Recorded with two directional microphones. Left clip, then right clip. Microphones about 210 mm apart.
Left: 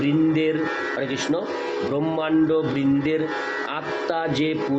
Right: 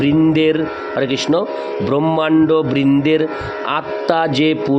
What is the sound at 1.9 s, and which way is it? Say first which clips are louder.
Music: right 8 dB; 50° right (ahead or behind).